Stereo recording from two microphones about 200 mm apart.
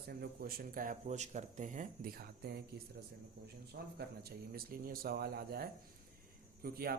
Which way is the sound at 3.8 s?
55° right (ahead or behind).